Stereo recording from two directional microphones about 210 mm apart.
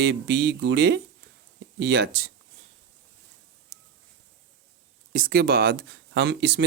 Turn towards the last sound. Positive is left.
turn(degrees=-50)  # may be behind; listen again after turning